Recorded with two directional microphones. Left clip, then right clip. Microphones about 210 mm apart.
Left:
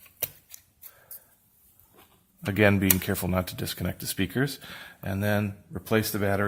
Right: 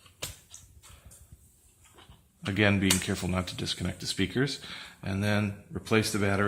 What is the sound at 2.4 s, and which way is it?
Speech, 50° left (ahead or behind).